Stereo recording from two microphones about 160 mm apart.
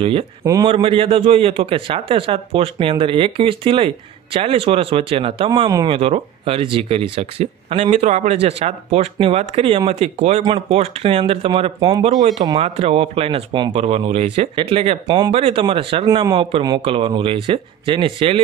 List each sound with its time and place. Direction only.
0.4 s speech: 20° right (ahead or behind)
0.7 s a man's voice: 35° right (ahead or behind)